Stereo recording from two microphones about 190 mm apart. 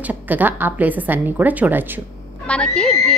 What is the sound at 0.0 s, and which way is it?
A woman's voice, 10° right (ahead or behind).